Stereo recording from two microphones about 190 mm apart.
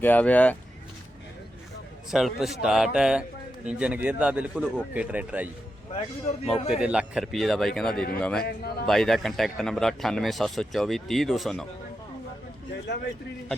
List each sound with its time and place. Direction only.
0.0 s speech: 10° left (ahead or behind)
2.0 s a man's voice: centre (ahead or behind)
8.4 s a man's voice: 55° left (ahead or behind)
8.9 s a man's voice: centre (ahead or behind)